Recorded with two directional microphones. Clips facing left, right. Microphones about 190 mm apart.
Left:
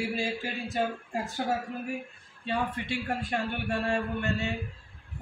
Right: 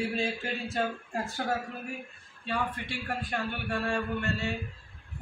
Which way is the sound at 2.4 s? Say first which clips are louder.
Left 2 dB; 20° left (ahead or behind).